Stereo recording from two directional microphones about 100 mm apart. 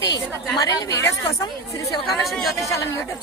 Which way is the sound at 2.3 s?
Centre (ahead or behind).